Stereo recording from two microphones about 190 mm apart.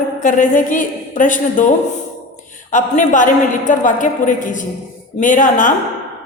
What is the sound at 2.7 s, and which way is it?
A woman's voice, 40° left (ahead or behind).